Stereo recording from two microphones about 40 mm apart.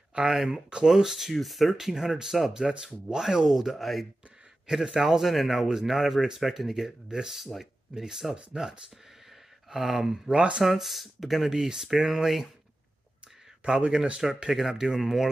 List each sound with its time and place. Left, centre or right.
0.1 s speech: right; by 4.1 s centre
4.6 s speech: centre
10.3 s speech: right
10.6 s speech: centre
13.7 s speech: right
14.2 s speech: centre
14.7 s speech: centre
15.0 s speech: centre